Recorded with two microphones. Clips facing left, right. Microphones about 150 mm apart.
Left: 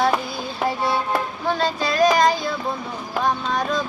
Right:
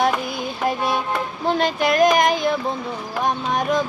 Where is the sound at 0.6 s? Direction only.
15° right (ahead or behind).